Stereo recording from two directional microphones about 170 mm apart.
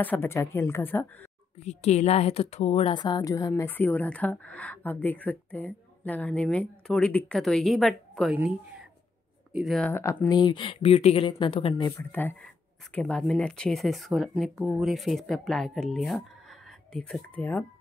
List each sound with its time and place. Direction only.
0.0 s a woman's voice: 10° left (ahead or behind)
1.6 s a woman's voice: 40° left (ahead or behind); by 8.4 s centre (ahead or behind)
9.5 s speech: centre (ahead or behind); by 11.9 s 30° left (ahead or behind)
12.0 s a woman's voice: 10° left (ahead or behind)